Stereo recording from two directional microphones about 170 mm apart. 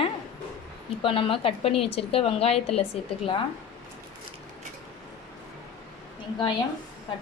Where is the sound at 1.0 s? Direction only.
30° left (ahead or behind).